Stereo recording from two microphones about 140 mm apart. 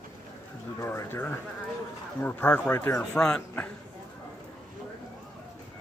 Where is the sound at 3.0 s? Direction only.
5° left (ahead or behind).